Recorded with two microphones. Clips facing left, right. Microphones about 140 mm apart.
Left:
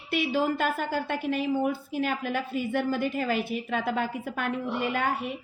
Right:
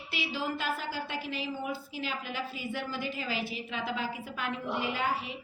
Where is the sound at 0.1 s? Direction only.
55° left (ahead or behind).